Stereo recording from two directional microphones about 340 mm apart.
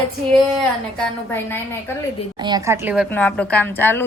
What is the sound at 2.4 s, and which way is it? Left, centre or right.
Speech, centre.